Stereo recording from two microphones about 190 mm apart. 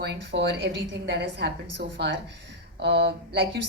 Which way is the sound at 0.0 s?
60° right (ahead or behind).